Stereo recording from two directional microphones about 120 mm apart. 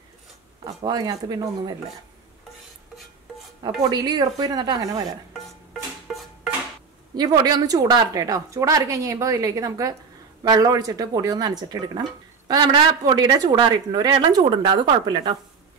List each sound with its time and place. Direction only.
0.8 s speech: 35° right (ahead or behind)
3.8 s speech: 35° right (ahead or behind)
5.7 s music: centre (ahead or behind)
7.2 s a woman's voice: 35° right (ahead or behind)
14.4 s speech: 45° right (ahead or behind)